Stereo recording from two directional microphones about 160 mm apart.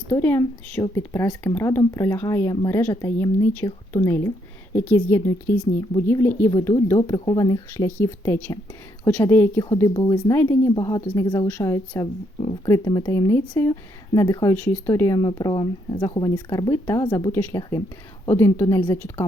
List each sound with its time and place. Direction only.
0.1 s speech: 15° left (ahead or behind)